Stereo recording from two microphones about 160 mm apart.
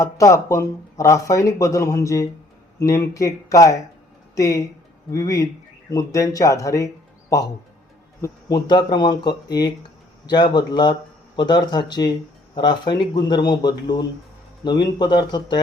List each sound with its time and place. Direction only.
0.0 s speech: 20° left (ahead or behind)